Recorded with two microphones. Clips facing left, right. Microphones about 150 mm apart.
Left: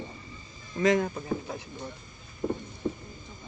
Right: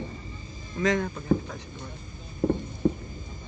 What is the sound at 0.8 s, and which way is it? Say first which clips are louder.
Speech: left 2 dB; 5° left (ahead or behind).